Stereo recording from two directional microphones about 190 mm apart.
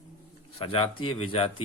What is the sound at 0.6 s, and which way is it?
A man's voice, 30° left (ahead or behind).